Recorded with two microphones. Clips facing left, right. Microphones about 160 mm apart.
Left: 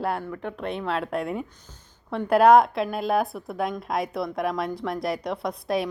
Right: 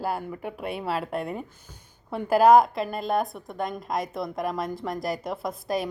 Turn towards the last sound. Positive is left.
turn(degrees=0)  # may be behind; listen again after turning